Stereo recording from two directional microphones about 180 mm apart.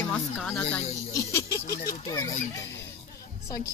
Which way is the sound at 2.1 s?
20° left (ahead or behind).